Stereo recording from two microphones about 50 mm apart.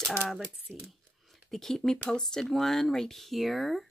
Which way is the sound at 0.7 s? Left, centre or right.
Right.